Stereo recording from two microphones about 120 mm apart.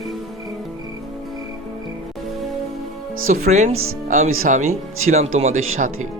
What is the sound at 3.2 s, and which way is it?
A man's voice, 90° right.